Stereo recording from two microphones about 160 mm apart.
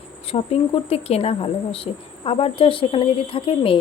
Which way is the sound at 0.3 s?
40° left (ahead or behind).